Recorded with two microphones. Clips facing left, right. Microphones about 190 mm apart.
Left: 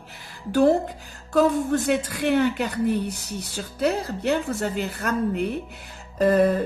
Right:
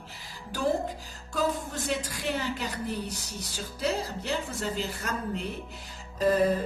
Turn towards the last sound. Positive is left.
turn(degrees=60)  # may be behind; listen again after turning